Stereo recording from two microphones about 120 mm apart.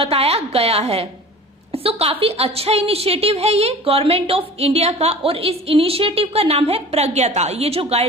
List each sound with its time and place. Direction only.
0.0 s a woman's voice: 55° right (ahead or behind)